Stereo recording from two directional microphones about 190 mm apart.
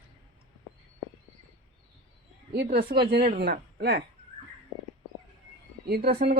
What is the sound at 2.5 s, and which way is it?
Speech, 55° right (ahead or behind).